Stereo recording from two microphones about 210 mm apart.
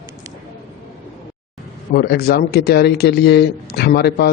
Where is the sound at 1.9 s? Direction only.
50° left (ahead or behind).